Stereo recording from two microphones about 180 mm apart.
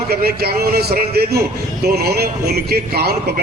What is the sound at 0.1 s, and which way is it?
A man's voice, 60° right (ahead or behind).